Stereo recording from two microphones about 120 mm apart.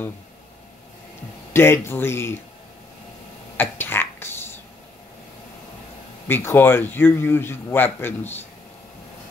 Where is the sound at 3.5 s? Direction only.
15° left (ahead or behind).